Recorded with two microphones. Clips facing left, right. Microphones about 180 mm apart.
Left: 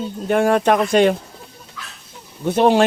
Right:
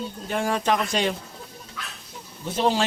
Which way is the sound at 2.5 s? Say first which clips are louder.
Left 8 dB; 60° left (ahead or behind).